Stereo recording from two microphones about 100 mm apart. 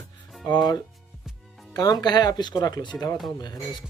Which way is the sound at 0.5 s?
45° left (ahead or behind).